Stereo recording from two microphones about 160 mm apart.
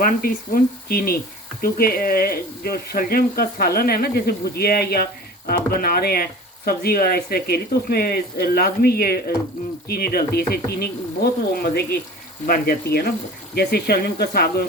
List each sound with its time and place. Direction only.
0.0 s speech: 60° left (ahead or behind)
13.6 s speech: 80° left